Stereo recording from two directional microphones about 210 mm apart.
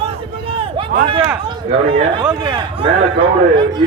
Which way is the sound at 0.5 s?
25° right (ahead or behind).